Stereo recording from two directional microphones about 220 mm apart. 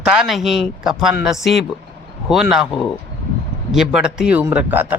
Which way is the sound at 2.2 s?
Centre (ahead or behind).